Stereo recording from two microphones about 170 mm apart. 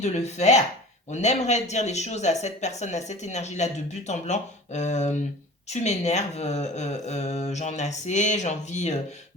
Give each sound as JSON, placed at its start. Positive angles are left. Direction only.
{"t": 0.0, "sound": "a woman's voice", "side_deg": 40}